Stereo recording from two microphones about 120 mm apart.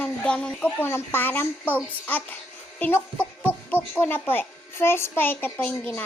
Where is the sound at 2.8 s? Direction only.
15° left (ahead or behind).